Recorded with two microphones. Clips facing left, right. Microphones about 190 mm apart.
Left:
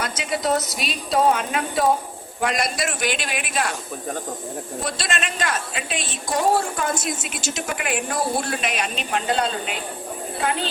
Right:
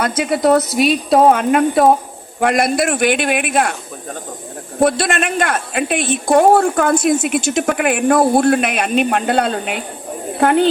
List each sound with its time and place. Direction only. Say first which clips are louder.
0.0 s a woman's voice: right 9 dB; 55° right (ahead or behind)
4.8 s a woman's voice: right 14 dB; 55° right (ahead or behind)